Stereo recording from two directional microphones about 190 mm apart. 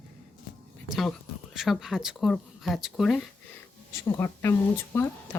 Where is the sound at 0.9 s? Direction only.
Centre (ahead or behind).